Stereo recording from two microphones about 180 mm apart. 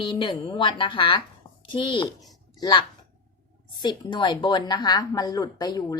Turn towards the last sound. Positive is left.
turn(degrees=25)  # may be behind; listen again after turning